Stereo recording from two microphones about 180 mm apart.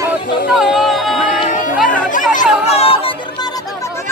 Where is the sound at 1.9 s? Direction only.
45° left (ahead or behind).